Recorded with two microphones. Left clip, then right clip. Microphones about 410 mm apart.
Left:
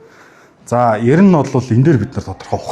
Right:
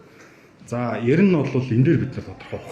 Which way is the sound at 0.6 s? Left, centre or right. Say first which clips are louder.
Left 10 dB; left.